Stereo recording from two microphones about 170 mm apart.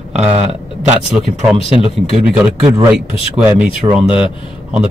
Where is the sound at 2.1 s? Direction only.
5° right (ahead or behind).